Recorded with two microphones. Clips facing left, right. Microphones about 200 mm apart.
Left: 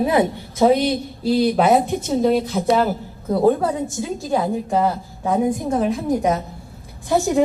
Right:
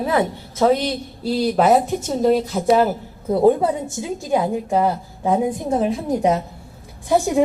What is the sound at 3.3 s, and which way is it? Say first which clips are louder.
A woman's voice: right 1 dB; 25° right (ahead or behind).